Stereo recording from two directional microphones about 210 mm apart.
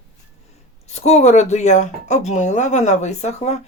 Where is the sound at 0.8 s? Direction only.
30° left (ahead or behind).